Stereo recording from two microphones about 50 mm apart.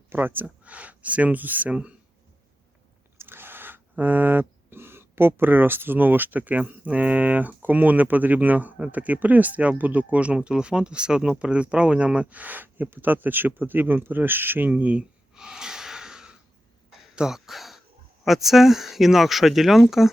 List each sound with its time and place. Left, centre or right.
0.1 s speech: right
0.6 s speech: right
1.7 s speech: right
3.2 s a sound: right
7.2 s speech: right
14.7 s speech: right
15.4 s snort: centre
17.2 s speech: centre